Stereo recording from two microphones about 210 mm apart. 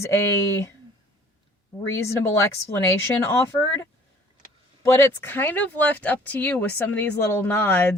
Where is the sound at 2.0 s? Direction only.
15° left (ahead or behind).